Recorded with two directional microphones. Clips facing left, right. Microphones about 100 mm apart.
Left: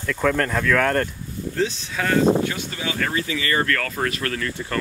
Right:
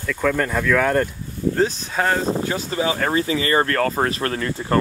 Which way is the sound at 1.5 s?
45° right (ahead or behind).